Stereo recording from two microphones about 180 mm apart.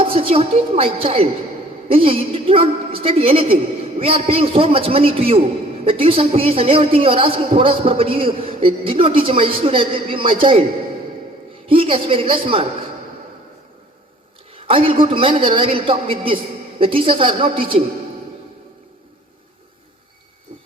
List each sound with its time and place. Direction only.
0.0 s a woman's voice: 30° right (ahead or behind)
11.7 s a man's voice: 30° right (ahead or behind)
14.5 s a man's voice: 30° right (ahead or behind)